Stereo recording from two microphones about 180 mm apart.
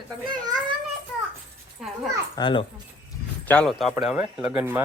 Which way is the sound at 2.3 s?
25° left (ahead or behind).